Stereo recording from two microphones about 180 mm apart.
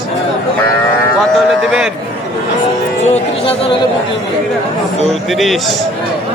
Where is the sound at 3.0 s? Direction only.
35° left (ahead or behind).